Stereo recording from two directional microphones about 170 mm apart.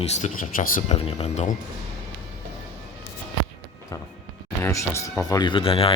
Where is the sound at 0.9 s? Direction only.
35° left (ahead or behind).